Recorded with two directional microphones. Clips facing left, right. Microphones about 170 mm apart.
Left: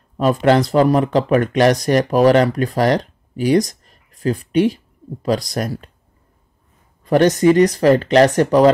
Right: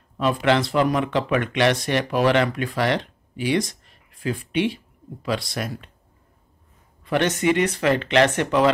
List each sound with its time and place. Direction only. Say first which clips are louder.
0.2 s speech: left 6 dB; 40° left (ahead or behind)
7.1 s speech: left 8 dB; 40° left (ahead or behind)